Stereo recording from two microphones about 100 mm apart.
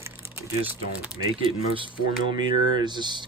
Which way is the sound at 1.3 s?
60° right (ahead or behind).